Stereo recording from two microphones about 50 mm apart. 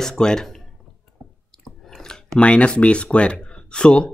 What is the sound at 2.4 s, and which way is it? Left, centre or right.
Speech, left.